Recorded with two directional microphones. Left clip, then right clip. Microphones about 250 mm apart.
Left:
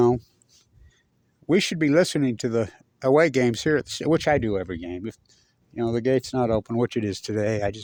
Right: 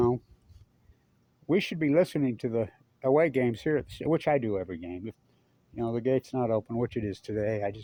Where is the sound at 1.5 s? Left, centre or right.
Left.